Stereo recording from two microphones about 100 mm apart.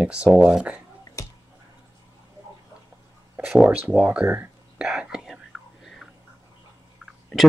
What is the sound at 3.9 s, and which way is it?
Speech, 15° right (ahead or behind).